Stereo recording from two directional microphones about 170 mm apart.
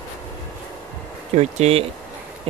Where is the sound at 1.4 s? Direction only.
40° right (ahead or behind).